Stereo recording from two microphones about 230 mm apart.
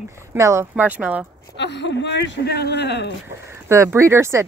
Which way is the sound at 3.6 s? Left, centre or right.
Centre.